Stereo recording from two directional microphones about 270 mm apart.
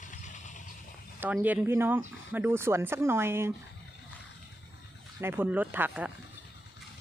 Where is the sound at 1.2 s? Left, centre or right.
Centre.